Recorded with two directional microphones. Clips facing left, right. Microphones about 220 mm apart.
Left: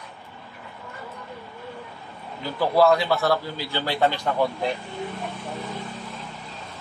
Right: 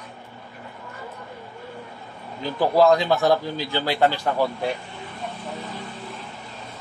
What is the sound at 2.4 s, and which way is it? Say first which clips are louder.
A man's voice: right 1 dB; 15° right (ahead or behind).